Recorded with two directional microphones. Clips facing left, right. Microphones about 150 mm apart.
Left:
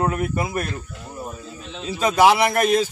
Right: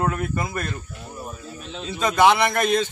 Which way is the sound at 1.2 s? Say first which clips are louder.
Left 3 dB; 20° left (ahead or behind).